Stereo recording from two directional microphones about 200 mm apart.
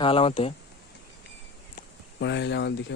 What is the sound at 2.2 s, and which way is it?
Speech, 60° left (ahead or behind).